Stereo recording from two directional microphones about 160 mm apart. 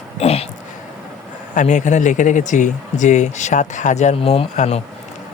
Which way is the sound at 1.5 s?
50° left (ahead or behind).